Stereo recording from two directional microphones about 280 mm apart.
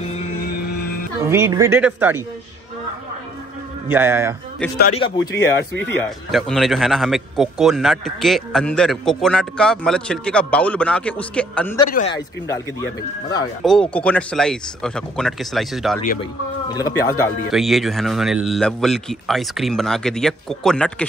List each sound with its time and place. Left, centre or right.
0.0 s a sound: left
1.2 s speech: centre
3.9 s speech: centre
4.9 s speech: centre
5.9 s a man's voice: centre
13.7 s a man's voice: centre
16.6 s speech: centre
17.5 s a man's voice: centre